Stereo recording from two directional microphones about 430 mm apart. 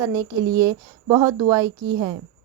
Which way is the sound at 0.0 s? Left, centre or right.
Centre.